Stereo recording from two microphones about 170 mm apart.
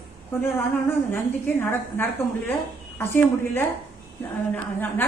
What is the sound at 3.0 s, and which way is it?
A woman's voice, 15° left (ahead or behind).